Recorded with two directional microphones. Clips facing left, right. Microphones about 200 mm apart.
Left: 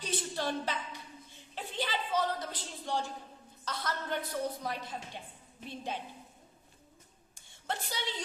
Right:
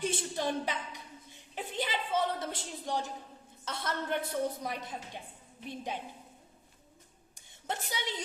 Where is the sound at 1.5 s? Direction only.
25° right (ahead or behind).